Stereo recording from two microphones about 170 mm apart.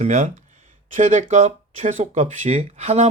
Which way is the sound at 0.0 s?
45° right (ahead or behind).